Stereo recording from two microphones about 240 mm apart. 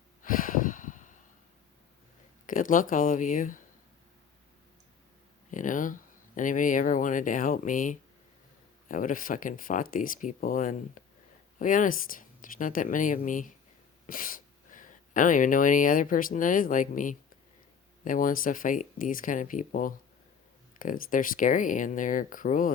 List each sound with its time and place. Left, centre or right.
0.2 s snort: left
2.5 s speech: left
5.5 s speech: left